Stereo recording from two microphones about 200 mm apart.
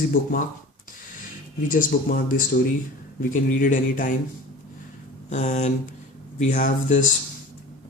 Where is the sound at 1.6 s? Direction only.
40° left (ahead or behind).